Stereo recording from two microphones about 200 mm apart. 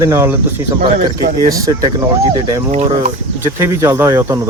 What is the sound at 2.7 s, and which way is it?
Speech, 35° right (ahead or behind).